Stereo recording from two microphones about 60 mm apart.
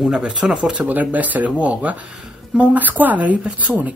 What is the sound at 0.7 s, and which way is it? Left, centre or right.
A woman's voice, right.